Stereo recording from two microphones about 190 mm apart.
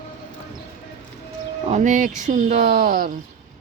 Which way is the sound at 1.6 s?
40° right (ahead or behind).